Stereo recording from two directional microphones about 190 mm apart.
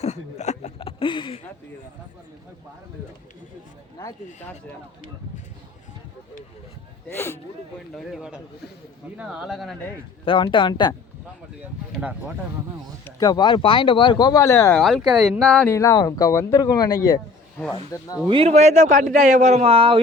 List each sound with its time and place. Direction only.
0.0 s speech: 35° left (ahead or behind)
7.1 s speech: 10° left (ahead or behind)
7.9 s speech: 5° right (ahead or behind)
10.2 s speech: 25° left (ahead or behind)
11.9 s speech: 10° right (ahead or behind)
13.1 s speech: 20° left (ahead or behind)
14.8 s speech: centre (ahead or behind); by 18.1 s 15° left (ahead or behind)
18.3 s speech: 30° right (ahead or behind)